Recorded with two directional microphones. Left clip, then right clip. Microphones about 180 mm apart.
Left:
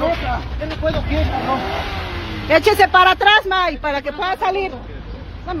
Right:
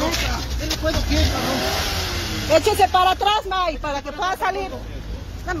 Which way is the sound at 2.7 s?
30° left (ahead or behind).